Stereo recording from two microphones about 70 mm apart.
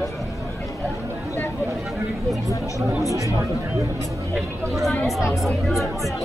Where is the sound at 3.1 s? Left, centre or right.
Right.